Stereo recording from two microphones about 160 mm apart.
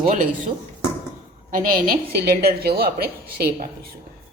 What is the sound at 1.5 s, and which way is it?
A woman's voice, 60° right (ahead or behind).